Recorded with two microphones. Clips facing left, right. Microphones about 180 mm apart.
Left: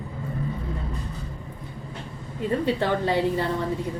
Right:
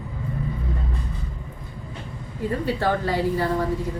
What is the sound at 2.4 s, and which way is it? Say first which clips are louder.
A woman's voice: left 1 dB; 25° left (ahead or behind).